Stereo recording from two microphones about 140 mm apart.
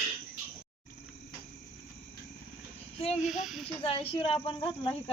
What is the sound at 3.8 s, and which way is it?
Speech, 40° left (ahead or behind).